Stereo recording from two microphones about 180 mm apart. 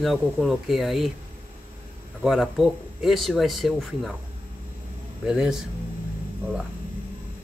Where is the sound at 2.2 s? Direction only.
Centre (ahead or behind).